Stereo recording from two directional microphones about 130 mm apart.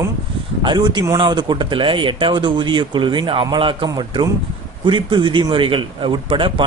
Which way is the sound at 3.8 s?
30° right (ahead or behind).